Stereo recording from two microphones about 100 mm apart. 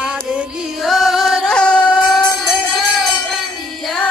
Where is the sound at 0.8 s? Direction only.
Centre (ahead or behind).